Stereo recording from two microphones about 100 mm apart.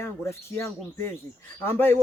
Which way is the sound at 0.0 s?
25° left (ahead or behind).